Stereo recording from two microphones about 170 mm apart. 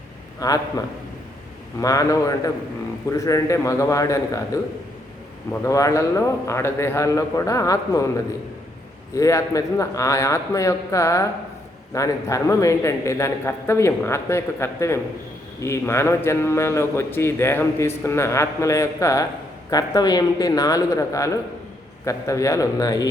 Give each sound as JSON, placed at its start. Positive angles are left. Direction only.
{"t": 0.3, "sound": "a man's voice", "side_deg": 20}
{"t": 1.8, "sound": "a man's voice", "side_deg": 20}
{"t": 5.5, "sound": "a man's voice", "side_deg": 20}
{"t": 9.1, "sound": "a man's voice", "side_deg": 20}